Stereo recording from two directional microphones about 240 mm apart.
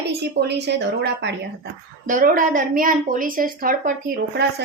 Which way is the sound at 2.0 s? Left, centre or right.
Right.